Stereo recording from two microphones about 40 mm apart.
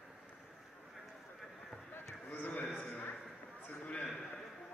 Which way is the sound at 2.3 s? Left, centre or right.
Left.